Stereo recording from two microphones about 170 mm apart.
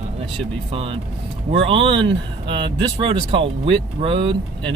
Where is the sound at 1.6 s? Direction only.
30° right (ahead or behind).